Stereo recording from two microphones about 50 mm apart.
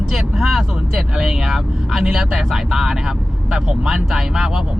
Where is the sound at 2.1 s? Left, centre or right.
Centre.